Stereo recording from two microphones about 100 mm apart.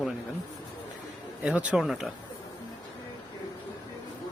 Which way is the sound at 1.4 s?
15° right (ahead or behind).